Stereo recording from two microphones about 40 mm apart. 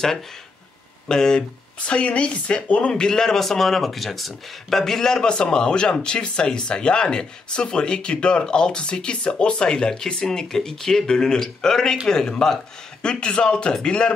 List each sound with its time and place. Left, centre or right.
1.0 s speech: centre
2.0 s speech: left
2.9 s speech: centre